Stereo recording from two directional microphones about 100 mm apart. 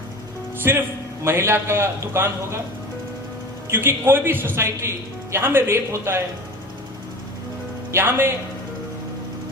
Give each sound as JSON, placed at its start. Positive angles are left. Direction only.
{"t": 0.6, "sound": "a man's voice", "side_deg": -25}
{"t": 3.7, "sound": "a man's voice", "side_deg": -25}
{"t": 7.9, "sound": "a man's voice", "side_deg": -25}